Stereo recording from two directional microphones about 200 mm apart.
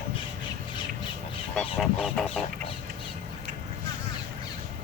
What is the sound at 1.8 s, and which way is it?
Fowl, centre (ahead or behind).